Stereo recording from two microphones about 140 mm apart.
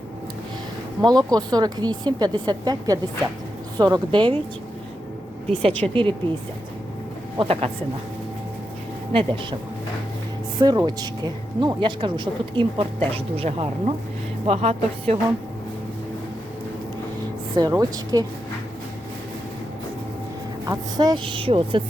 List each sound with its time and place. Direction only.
1.0 s speech: 30° right (ahead or behind)
5.9 s speech: 35° right (ahead or behind)
7.3 s speech: 40° right (ahead or behind)
9.1 s speech: 35° right (ahead or behind)
10.6 s speech: 30° right (ahead or behind); by 15.2 s 45° right (ahead or behind)
17.5 s speech: 30° right (ahead or behind)
20.7 s speech: 30° right (ahead or behind)